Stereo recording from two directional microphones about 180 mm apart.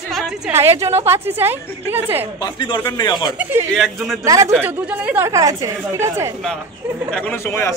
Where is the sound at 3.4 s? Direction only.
15° right (ahead or behind).